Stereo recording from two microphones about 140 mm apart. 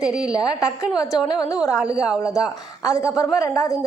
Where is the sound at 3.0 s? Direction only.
20° left (ahead or behind).